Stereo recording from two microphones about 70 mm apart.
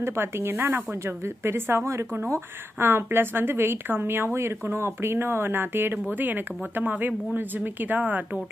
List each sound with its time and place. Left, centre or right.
0.0 s a woman's voice: right